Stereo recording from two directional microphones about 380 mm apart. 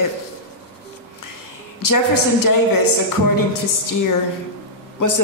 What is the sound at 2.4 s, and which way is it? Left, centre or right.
A woman's voice, left.